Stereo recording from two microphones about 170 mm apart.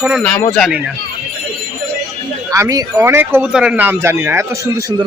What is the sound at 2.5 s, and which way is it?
Speech, 20° right (ahead or behind).